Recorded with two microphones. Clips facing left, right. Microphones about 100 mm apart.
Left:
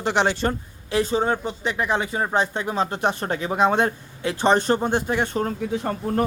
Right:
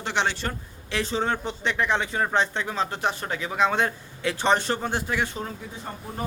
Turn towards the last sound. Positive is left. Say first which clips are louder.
# left 10 dB
turn(degrees=75)  # may be behind; listen again after turning